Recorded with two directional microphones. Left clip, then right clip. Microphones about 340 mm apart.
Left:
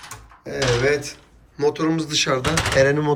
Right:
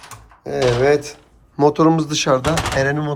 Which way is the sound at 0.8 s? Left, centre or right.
Centre.